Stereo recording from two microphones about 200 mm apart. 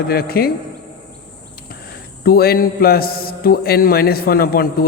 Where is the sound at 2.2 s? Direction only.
50° left (ahead or behind).